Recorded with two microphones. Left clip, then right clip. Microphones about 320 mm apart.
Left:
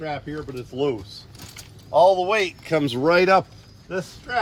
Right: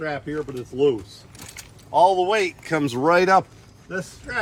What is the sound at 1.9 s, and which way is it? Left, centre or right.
Speech, centre.